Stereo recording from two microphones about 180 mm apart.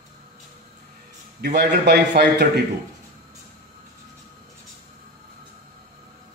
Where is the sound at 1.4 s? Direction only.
65° right (ahead or behind).